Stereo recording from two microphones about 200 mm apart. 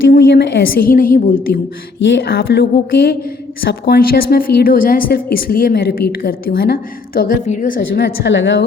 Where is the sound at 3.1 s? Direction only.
45° left (ahead or behind).